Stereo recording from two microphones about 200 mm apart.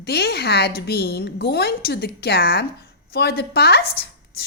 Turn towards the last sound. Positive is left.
turn(degrees=50)  # may be behind; listen again after turning